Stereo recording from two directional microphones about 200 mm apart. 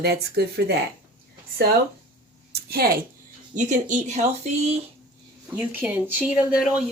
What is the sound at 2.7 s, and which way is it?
Speech, 50° right (ahead or behind).